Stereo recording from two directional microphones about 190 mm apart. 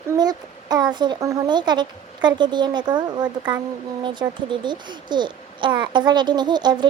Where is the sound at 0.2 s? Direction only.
20° right (ahead or behind).